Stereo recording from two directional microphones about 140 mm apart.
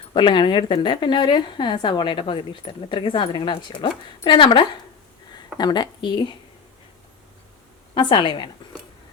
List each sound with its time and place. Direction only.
0.1 s a woman's voice: 35° left (ahead or behind)
7.9 s a woman's voice: 35° left (ahead or behind)